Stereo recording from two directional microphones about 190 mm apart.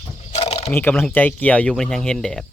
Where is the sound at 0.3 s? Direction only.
35° left (ahead or behind).